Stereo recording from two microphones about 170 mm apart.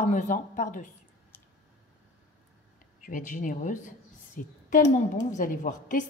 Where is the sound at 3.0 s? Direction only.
50° left (ahead or behind).